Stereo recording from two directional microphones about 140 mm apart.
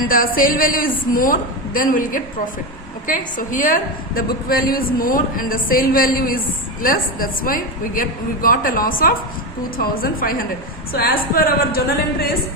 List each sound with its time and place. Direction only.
0.1 s a woman's voice: 90° left